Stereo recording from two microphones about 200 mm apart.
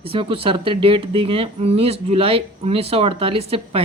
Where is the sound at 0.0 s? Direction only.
25° right (ahead or behind).